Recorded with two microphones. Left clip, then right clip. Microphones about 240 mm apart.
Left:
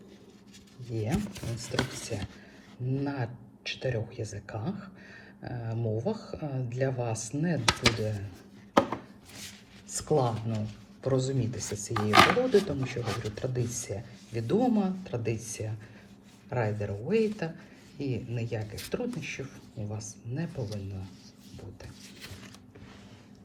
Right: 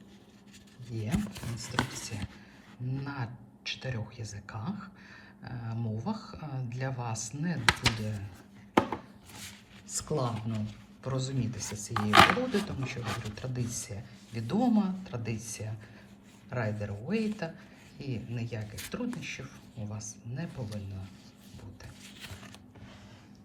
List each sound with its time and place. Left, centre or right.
0.9 s speech: centre
9.9 s speech: centre